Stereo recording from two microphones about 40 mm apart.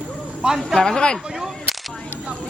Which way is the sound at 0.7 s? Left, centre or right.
Left.